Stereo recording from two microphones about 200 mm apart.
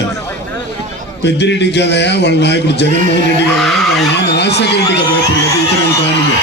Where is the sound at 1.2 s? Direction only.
60° left (ahead or behind).